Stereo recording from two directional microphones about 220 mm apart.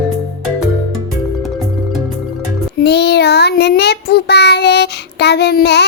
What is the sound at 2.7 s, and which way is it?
Child singing, 50° left (ahead or behind).